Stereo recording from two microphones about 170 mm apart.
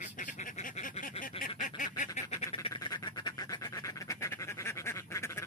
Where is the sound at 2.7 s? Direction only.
25° left (ahead or behind).